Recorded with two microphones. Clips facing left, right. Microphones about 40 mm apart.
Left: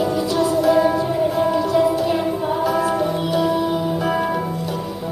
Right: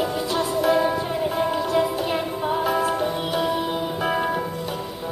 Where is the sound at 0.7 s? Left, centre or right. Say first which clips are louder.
Left 4 dB; centre.